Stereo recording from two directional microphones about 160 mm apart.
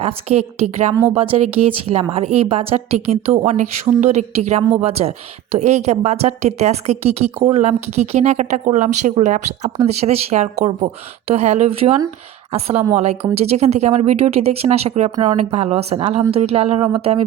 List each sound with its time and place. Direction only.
0.0 s a woman's voice: 40° right (ahead or behind)
0.9 s speech: 10° right (ahead or behind)
1.2 s a woman's voice: 35° right (ahead or behind)